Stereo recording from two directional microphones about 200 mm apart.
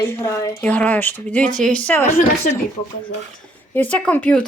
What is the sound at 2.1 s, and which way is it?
Speech, 35° left (ahead or behind).